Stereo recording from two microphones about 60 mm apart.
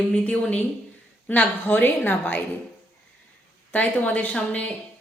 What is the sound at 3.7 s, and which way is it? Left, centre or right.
A woman's voice, left.